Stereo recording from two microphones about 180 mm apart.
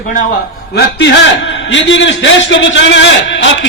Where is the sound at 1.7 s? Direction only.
90° left.